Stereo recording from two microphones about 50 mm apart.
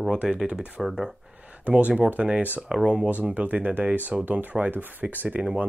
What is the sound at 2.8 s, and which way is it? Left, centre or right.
Speech, right.